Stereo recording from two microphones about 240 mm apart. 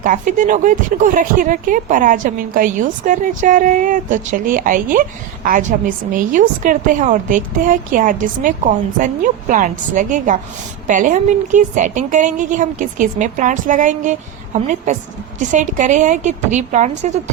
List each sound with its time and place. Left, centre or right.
0.0 s speech: right